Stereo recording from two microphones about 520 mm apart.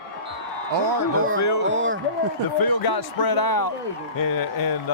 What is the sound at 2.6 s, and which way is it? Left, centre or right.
A man's voice, left.